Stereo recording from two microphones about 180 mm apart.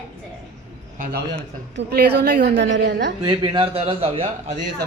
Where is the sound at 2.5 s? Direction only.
90° right; by 3.1 s 75° right (ahead or behind).